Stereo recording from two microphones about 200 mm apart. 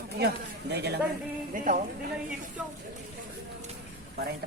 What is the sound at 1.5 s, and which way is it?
Speech, 40° right (ahead or behind).